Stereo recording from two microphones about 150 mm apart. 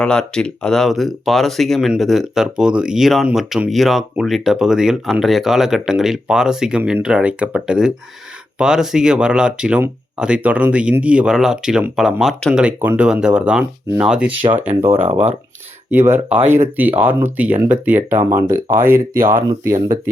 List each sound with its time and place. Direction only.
0.0 s speech: 5° left (ahead or behind); by 15.1 s 15° right (ahead or behind)
15.1 s speech: 45° right (ahead or behind)
15.9 s speech: 15° right (ahead or behind)